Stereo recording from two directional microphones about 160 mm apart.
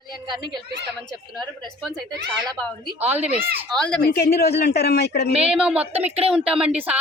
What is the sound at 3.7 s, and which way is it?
Speech, 5° left (ahead or behind).